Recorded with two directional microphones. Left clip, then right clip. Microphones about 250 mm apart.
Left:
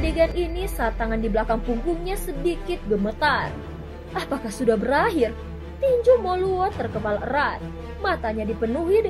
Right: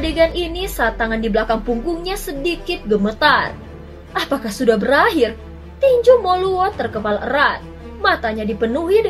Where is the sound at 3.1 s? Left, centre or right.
Left.